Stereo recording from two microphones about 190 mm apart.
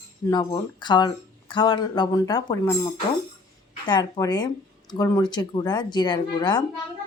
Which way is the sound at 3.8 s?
25° left (ahead or behind).